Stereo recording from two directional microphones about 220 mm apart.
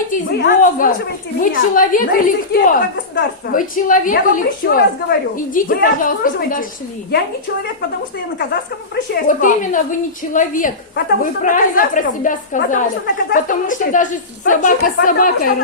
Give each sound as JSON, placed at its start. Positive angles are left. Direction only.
{"t": 0.1, "sound": "a woman's voice", "side_deg": 40}
{"t": 9.2, "sound": "a woman's voice", "side_deg": 35}